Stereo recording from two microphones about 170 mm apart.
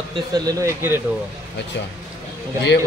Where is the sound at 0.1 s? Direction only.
25° right (ahead or behind).